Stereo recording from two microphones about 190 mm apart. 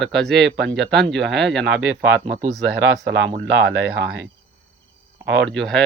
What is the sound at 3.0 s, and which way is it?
Speech, 70° right (ahead or behind).